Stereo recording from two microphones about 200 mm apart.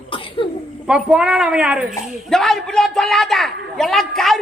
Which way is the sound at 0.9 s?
5° right (ahead or behind).